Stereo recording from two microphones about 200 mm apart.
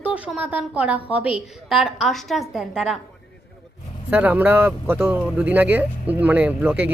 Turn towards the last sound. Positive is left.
turn(degrees=-5)  # may be behind; listen again after turning